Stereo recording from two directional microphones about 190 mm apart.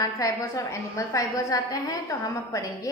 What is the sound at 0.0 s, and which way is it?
A woman's voice, 15° left (ahead or behind).